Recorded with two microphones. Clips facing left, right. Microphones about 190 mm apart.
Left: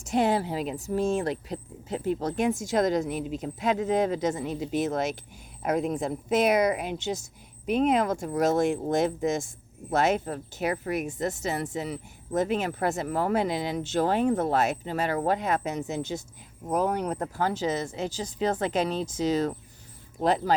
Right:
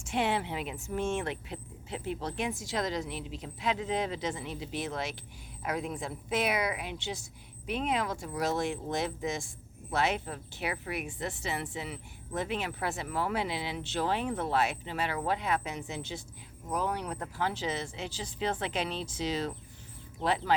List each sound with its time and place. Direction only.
0.0 s speech: 40° left (ahead or behind)